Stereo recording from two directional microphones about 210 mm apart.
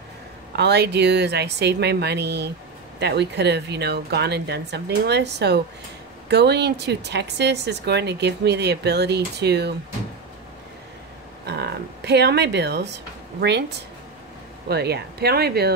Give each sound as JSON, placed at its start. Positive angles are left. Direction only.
{"t": 0.6, "sound": "a woman's voice", "side_deg": -55}
{"t": 11.4, "sound": "music", "side_deg": -50}
{"t": 13.4, "sound": "a woman's voice", "side_deg": -55}